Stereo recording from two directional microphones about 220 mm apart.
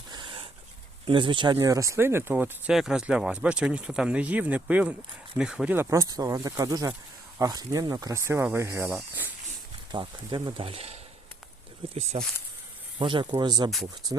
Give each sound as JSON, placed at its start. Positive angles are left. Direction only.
{"t": 0.1, "sound": "dog", "side_deg": -20}
{"t": 1.0, "sound": "speech", "side_deg": -20}
{"t": 9.9, "sound": "speech", "side_deg": -20}
{"t": 13.0, "sound": "speech", "side_deg": -20}